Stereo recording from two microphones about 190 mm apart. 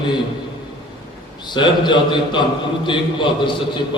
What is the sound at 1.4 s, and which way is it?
A man's voice, 25° left (ahead or behind).